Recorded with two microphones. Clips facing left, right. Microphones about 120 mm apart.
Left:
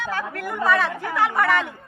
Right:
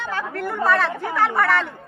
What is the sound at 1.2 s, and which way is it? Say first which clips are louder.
Speech: right 1 dB; 10° left (ahead or behind).